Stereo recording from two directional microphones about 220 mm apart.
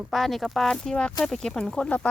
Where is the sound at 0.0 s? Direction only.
Centre (ahead or behind).